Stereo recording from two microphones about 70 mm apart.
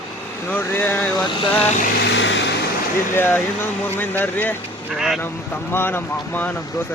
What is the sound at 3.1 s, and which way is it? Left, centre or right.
Speech, left.